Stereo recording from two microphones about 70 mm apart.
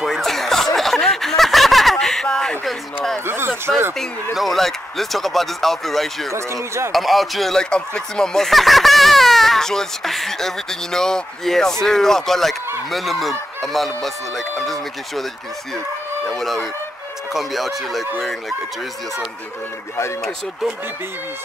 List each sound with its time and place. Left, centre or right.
0.0 s chuckle: centre
0.7 s snicker: centre
3.3 s a sound: right
4.0 s speech: centre
6.3 s speech: right
6.9 s speech: centre
16.3 s speech: centre